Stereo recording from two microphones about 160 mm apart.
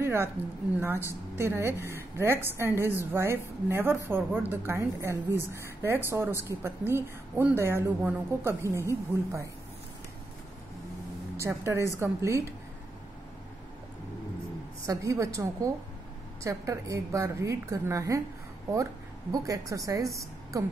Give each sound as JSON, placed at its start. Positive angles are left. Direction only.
{"t": 0.0, "sound": "a sound", "side_deg": -15}
{"t": 0.7, "sound": "a woman's voice", "side_deg": -15}
{"t": 11.3, "sound": "a woman's voice", "side_deg": -15}
{"t": 14.9, "sound": "a woman's voice", "side_deg": -20}
{"t": 19.3, "sound": "a woman's voice", "side_deg": -20}